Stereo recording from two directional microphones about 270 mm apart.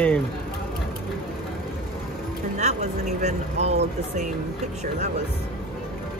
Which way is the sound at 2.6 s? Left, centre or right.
Right.